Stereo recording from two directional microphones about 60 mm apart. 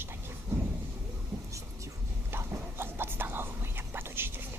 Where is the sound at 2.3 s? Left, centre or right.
Right.